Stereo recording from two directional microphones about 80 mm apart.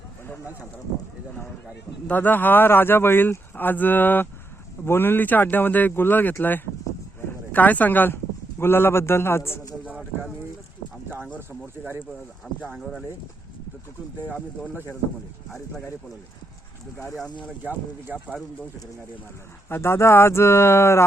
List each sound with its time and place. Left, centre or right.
2.0 s speech: left
7.5 s speech: left
9.8 s a sound: centre
12.7 s speech: centre
17.6 s speech: centre
19.6 s speech: left